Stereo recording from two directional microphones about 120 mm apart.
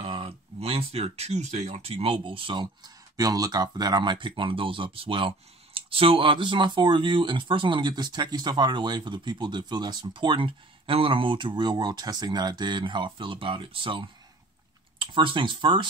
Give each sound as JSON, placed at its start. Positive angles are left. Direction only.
{"t": 0.0, "sound": "speech", "side_deg": -50}